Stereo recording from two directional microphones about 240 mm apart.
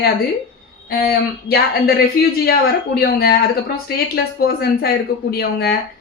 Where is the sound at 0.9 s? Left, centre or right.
Left.